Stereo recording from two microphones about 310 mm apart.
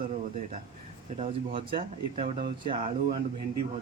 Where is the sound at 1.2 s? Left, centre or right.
Centre.